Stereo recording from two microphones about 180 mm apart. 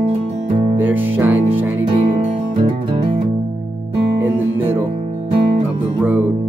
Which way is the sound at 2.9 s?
35° right (ahead or behind).